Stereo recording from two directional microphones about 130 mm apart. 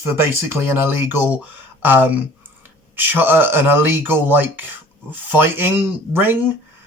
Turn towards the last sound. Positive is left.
turn(degrees=-15)  # may be behind; listen again after turning